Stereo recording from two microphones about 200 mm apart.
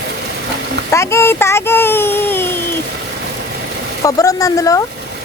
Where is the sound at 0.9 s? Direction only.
15° left (ahead or behind).